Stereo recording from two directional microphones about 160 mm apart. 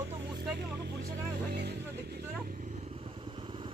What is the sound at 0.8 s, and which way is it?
Vehicle, 90° right.